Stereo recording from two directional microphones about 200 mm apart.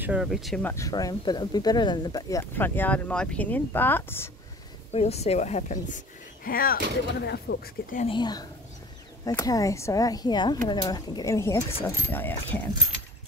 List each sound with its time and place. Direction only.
0.0 s speech: 5° right (ahead or behind); by 4.3 s 10° left (ahead or behind)
4.9 s speech: 30° left (ahead or behind)
8.1 s speech: 20° left (ahead or behind)